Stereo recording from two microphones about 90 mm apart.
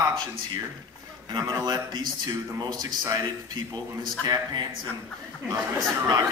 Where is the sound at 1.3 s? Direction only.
55° right (ahead or behind).